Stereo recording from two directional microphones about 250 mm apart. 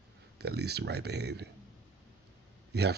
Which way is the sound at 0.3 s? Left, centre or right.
Right.